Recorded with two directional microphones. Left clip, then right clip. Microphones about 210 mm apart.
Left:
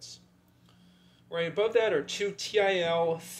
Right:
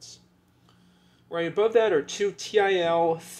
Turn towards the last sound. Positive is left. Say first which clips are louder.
# right 4 dB
turn(degrees=-40)  # may be behind; listen again after turning